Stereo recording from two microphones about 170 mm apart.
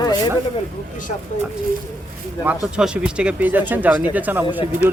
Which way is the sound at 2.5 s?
5° right (ahead or behind).